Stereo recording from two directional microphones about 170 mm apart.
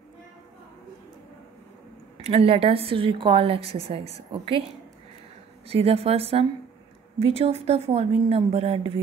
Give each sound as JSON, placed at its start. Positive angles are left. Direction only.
{"t": 2.2, "sound": "a woman's voice", "side_deg": -35}
{"t": 5.7, "sound": "a woman's voice", "side_deg": -35}